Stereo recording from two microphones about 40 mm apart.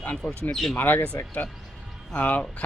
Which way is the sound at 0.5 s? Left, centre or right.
Centre.